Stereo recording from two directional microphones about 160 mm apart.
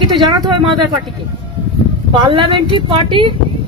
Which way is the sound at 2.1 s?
30° right (ahead or behind).